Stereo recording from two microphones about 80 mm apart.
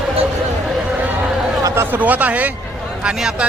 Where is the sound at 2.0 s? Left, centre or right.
Centre.